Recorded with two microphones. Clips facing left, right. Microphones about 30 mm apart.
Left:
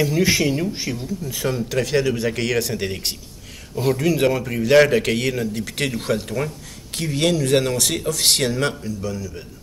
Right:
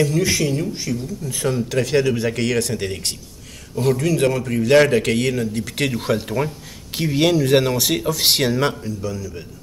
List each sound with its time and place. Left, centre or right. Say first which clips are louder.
0.0 s speech: even; centre
1.2 s a man's voice: right 1 dB; centre